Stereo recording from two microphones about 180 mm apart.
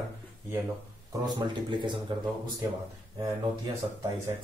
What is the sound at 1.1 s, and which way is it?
Speech, 25° right (ahead or behind).